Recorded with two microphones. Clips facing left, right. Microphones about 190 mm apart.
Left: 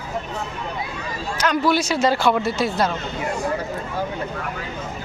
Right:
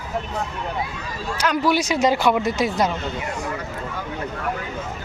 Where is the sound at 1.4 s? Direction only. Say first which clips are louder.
Left 1 dB; 10° right (ahead or behind).